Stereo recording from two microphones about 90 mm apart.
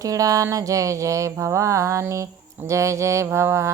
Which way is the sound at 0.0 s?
40° right (ahead or behind).